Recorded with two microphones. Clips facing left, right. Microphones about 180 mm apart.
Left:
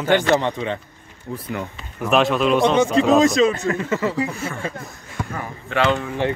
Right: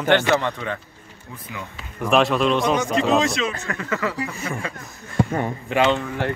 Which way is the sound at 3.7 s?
25° left (ahead or behind).